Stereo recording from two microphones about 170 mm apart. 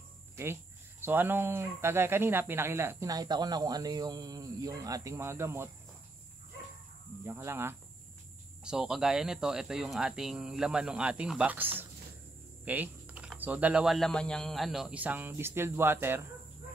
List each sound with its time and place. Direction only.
1.0 s speech: 10° right (ahead or behind)
7.2 s speech: 15° right (ahead or behind)